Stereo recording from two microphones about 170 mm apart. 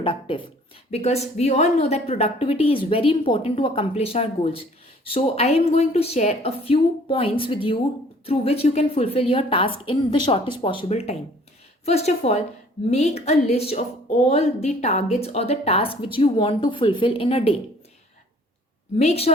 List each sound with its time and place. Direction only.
0.0 s speech: 30° left (ahead or behind)
18.9 s speech: 35° left (ahead or behind)